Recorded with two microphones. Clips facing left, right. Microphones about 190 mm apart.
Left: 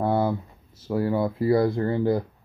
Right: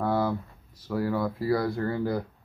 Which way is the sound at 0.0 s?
25° left (ahead or behind).